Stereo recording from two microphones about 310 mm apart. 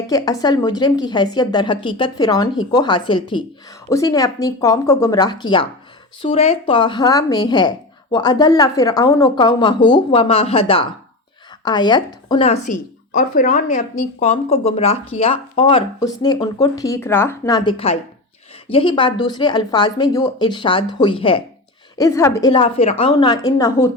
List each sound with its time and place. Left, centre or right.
0.1 s speech: centre